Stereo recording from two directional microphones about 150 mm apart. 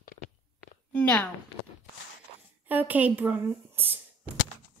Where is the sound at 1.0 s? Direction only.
10° left (ahead or behind).